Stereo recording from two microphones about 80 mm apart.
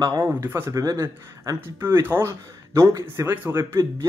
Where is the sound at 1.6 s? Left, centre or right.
Right.